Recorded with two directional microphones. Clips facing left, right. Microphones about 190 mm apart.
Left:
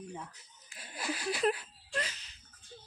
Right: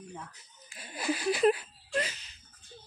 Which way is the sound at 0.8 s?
Centre (ahead or behind).